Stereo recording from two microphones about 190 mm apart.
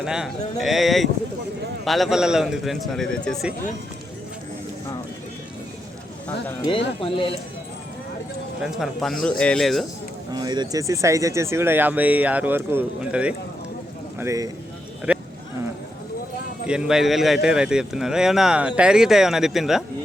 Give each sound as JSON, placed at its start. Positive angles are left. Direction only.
{"t": 0.0, "sound": "a man's voice", "side_deg": -5}
{"t": 6.7, "sound": "speech", "side_deg": 25}
{"t": 8.6, "sound": "a man's voice", "side_deg": 0}
{"t": 10.3, "sound": "speech", "side_deg": -20}
{"t": 14.2, "sound": "speech", "side_deg": -15}
{"t": 15.1, "sound": "a sound", "side_deg": -5}
{"t": 16.6, "sound": "a man's voice", "side_deg": -5}